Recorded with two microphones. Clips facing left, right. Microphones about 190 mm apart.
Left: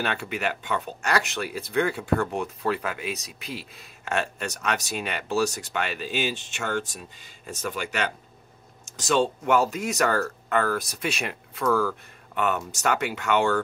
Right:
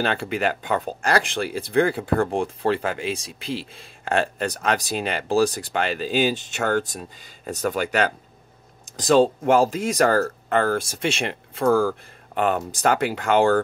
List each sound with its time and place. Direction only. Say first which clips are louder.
0.0 s speech: right 5 dB; 30° right (ahead or behind)